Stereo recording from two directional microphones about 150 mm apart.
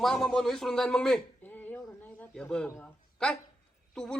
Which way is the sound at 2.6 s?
10° left (ahead or behind).